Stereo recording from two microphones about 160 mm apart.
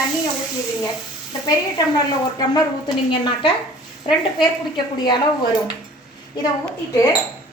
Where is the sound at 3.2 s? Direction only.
30° left (ahead or behind).